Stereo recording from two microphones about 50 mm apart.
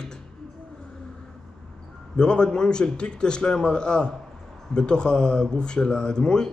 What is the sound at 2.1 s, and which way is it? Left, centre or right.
Speech, centre.